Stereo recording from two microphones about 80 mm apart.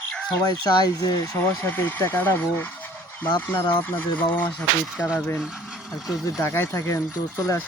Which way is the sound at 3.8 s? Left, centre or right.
Left.